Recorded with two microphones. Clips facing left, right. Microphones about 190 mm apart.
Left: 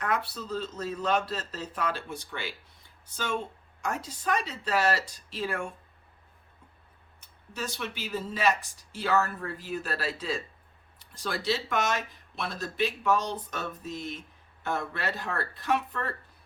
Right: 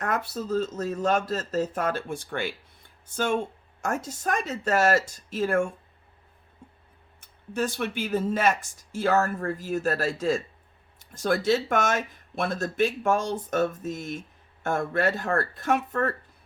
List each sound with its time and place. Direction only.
0.0 s speech: 45° right (ahead or behind)
7.2 s speech: 50° right (ahead or behind)